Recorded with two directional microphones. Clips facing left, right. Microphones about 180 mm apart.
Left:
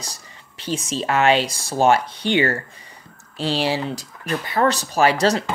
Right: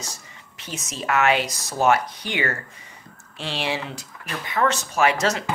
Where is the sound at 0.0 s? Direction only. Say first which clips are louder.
Even; 35° left (ahead or behind).